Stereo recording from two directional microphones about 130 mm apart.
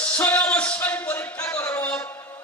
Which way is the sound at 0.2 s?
15° left (ahead or behind).